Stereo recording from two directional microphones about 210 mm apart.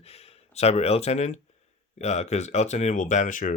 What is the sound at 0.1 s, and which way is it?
Speech, 30° left (ahead or behind).